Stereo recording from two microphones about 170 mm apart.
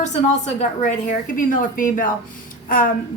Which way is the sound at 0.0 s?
40° left (ahead or behind).